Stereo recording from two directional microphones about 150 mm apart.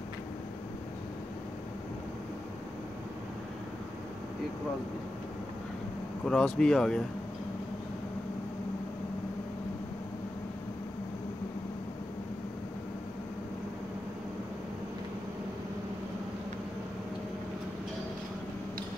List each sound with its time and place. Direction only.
6.2 s speech: 5° left (ahead or behind)